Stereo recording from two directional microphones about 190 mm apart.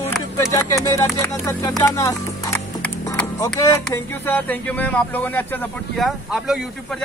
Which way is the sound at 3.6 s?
15° left (ahead or behind).